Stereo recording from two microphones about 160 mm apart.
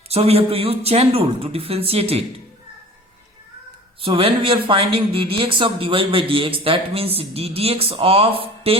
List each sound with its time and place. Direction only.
0.1 s speech: 40° right (ahead or behind)
4.0 s speech: 35° right (ahead or behind)